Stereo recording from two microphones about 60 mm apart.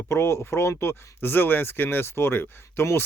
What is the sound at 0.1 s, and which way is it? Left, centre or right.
Speech, left.